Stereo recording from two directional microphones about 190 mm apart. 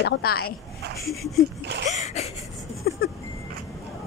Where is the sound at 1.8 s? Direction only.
35° left (ahead or behind).